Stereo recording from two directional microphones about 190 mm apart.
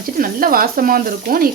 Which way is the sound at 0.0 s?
50° right (ahead or behind).